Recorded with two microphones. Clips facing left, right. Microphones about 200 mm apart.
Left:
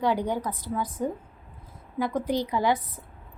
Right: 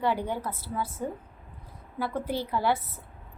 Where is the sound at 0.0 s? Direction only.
15° left (ahead or behind).